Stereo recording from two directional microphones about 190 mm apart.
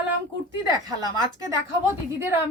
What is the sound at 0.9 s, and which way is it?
A woman's voice, 15° right (ahead or behind).